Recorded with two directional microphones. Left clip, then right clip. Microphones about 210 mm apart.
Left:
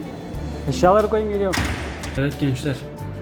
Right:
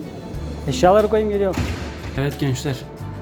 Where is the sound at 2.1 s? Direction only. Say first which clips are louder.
Even; 30° right (ahead or behind).